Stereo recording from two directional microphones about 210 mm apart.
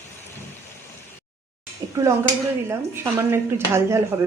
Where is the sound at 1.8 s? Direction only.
15° right (ahead or behind).